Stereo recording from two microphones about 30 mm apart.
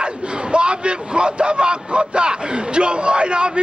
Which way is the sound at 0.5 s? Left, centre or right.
Right.